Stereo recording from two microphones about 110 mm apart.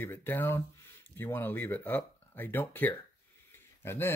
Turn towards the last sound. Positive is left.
turn(degrees=20)  # may be behind; listen again after turning